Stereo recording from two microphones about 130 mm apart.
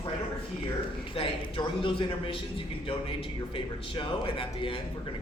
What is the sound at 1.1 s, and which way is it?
A man's voice, 40° left (ahead or behind).